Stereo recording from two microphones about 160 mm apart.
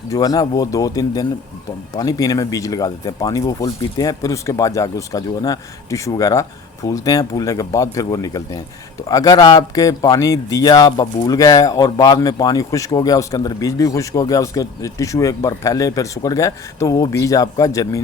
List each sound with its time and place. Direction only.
0.1 s speech: 25° left (ahead or behind)